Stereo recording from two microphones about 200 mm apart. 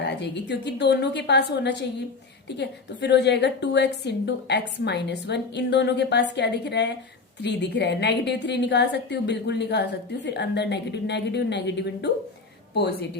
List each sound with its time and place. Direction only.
0.0 s a woman's voice: 60° left (ahead or behind)